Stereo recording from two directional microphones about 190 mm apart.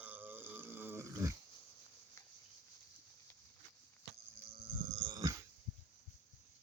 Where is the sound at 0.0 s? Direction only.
10° right (ahead or behind).